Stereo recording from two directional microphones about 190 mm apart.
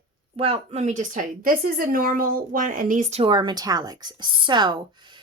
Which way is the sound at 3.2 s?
25° right (ahead or behind).